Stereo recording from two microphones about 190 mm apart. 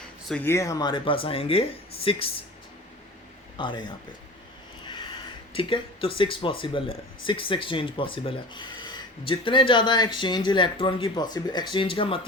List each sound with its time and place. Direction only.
0.3 s speech: 10° left (ahead or behind); by 2.3 s 30° left (ahead or behind)
3.6 s speech: 25° left (ahead or behind)
5.5 s speech: 25° left (ahead or behind)